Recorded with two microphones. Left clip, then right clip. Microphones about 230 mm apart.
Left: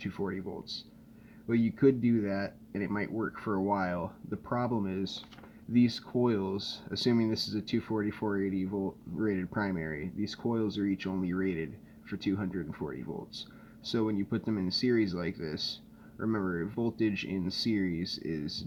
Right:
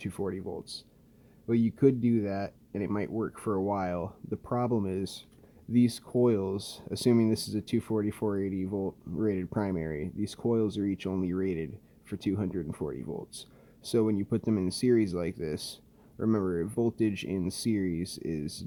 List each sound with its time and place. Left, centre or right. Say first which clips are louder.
0.0 s speech: right 2 dB; right